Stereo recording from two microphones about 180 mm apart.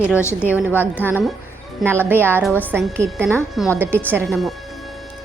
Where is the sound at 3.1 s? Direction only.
15° right (ahead or behind).